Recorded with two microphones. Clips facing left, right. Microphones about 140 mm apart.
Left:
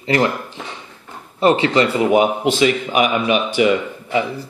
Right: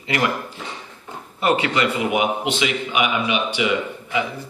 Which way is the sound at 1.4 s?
30° left (ahead or behind).